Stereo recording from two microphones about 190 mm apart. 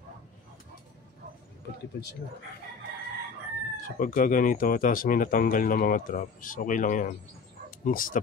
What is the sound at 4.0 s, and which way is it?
Speech, 45° left (ahead or behind).